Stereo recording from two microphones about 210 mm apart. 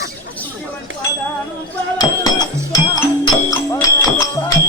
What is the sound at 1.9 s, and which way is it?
Speech, 15° left (ahead or behind).